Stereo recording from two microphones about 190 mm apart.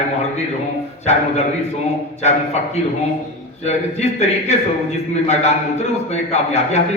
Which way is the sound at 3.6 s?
35° left (ahead or behind).